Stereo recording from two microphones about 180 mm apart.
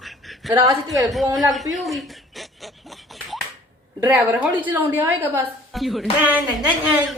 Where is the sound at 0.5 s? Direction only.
15° right (ahead or behind).